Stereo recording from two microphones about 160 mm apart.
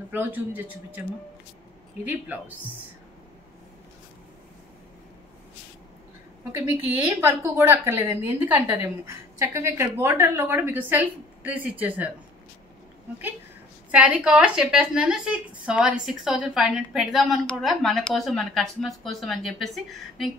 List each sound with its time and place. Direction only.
0.1 s a woman's voice: 10° right (ahead or behind)
2.0 s a woman's voice: 10° right (ahead or behind)
7.2 s a woman's voice: 15° right (ahead or behind)
13.9 s a woman's voice: 5° right (ahead or behind)